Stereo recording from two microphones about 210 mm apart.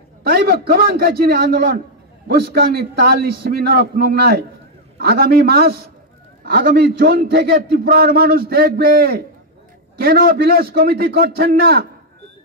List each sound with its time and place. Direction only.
0.2 s a man's voice: 45° right (ahead or behind)